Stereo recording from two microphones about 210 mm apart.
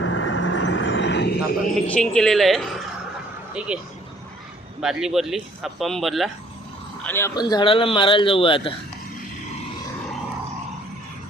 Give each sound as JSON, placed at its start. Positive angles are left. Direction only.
{"t": 0.0, "sound": "vehicle", "side_deg": 65}
{"t": 1.9, "sound": "speech", "side_deg": 5}
{"t": 4.8, "sound": "speech", "side_deg": 0}
{"t": 7.0, "sound": "speech", "side_deg": 10}